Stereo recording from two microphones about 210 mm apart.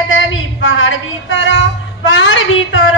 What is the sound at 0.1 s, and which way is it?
A woman's voice, 65° left (ahead or behind).